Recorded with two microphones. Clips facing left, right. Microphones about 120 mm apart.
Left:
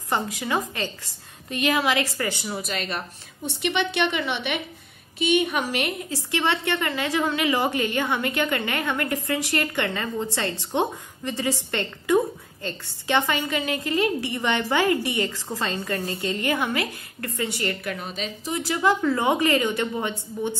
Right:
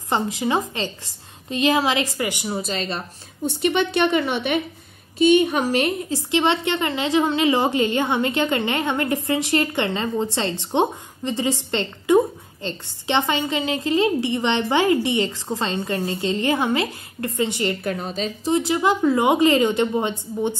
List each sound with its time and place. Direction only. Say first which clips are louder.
0.1 s a woman's voice: right 4 dB; 25° right (ahead or behind)
2.4 s a woman's voice: right 4 dB; 30° right (ahead or behind)
6.1 s a woman's voice: right 4 dB; 20° right (ahead or behind)
17.8 s a woman's voice: right 5 dB; 35° right (ahead or behind)